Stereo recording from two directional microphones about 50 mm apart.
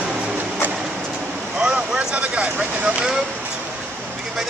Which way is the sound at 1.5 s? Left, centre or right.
Centre.